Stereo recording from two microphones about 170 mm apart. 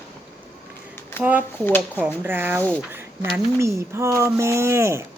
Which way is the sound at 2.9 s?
15° right (ahead or behind).